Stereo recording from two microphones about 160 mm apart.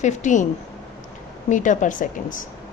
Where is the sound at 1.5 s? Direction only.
50° left (ahead or behind).